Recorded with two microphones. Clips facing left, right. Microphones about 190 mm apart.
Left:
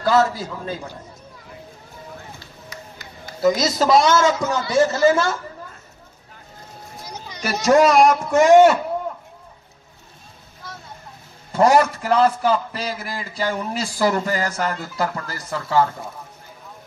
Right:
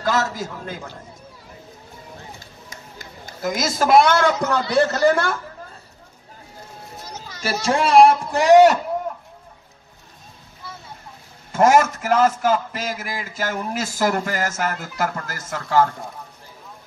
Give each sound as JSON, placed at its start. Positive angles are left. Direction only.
{"t": 0.0, "sound": "a man's voice", "side_deg": -45}
{"t": 2.7, "sound": "a man's voice", "side_deg": -45}
{"t": 7.1, "sound": "a sound", "side_deg": 15}
{"t": 7.6, "sound": "a man's voice", "side_deg": -30}
{"t": 11.5, "sound": "a man's voice", "side_deg": -45}